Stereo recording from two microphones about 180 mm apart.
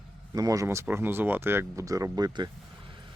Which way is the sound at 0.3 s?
20° right (ahead or behind).